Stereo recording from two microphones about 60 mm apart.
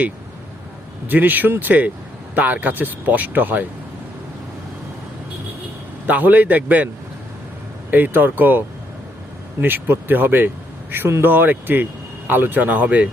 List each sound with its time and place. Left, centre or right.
1.0 s speech: right
6.1 s a man's voice: right